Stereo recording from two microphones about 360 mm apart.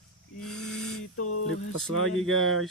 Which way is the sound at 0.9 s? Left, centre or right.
Left.